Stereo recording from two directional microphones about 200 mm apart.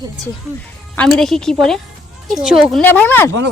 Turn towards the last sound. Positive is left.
turn(degrees=10)  # may be behind; listen again after turning